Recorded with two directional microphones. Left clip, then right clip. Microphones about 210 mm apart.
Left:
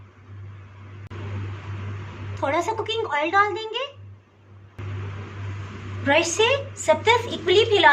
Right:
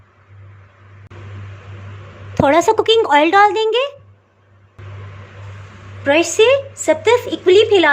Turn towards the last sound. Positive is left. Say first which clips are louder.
# right 6 dB
turn(degrees=-40)  # may be behind; listen again after turning